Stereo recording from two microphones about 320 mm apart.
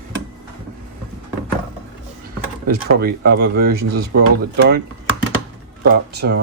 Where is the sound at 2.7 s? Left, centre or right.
Right.